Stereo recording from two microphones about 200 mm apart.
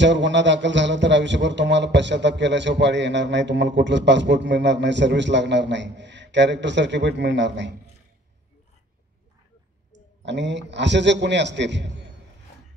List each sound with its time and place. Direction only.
0.0 s speech: 65° right (ahead or behind)
10.2 s speech: 60° right (ahead or behind)